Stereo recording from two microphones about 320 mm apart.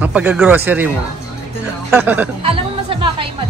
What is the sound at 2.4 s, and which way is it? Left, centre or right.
Music, centre.